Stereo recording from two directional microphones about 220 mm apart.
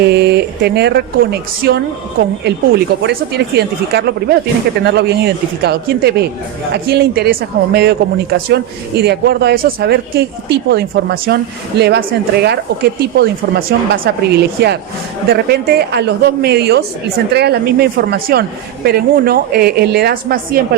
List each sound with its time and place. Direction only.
0.0 s speech: 50° right (ahead or behind)